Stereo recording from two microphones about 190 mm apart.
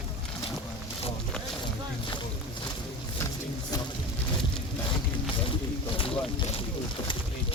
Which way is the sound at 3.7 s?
20° left (ahead or behind).